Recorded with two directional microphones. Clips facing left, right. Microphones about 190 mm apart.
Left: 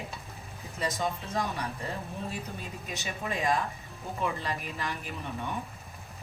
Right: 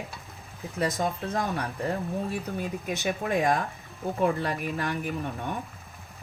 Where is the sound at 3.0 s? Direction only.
55° right (ahead or behind).